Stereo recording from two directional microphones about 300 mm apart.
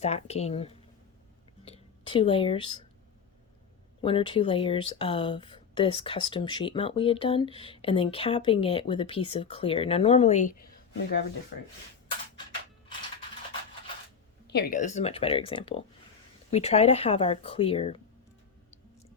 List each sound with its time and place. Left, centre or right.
0.0 s speech: left
1.6 s a sound: centre
4.0 s speech: centre
14.4 s speech: left